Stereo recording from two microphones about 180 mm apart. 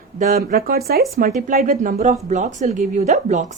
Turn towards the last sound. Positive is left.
turn(degrees=-40)  # may be behind; listen again after turning